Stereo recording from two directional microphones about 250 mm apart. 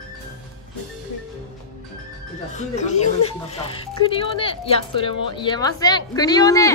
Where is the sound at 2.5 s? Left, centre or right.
Left.